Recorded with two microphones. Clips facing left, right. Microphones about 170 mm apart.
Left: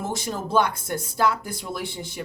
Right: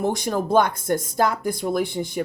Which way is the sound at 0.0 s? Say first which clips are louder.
Right 6 dB; 55° right (ahead or behind).